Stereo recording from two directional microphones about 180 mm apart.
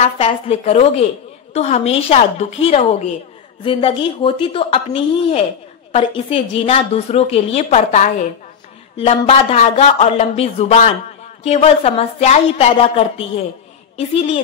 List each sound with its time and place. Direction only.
0.0 s a woman's voice: 35° left (ahead or behind)
8.9 s a woman's voice: 30° left (ahead or behind)